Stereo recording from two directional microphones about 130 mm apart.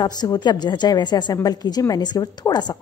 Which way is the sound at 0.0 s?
30° left (ahead or behind).